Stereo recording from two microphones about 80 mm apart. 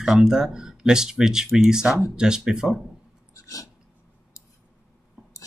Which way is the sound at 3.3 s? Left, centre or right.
Left.